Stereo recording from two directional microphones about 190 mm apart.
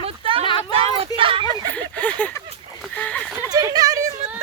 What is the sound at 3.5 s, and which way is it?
Speech, 20° right (ahead or behind).